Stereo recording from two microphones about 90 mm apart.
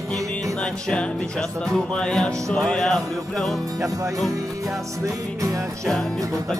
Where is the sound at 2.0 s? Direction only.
10° left (ahead or behind).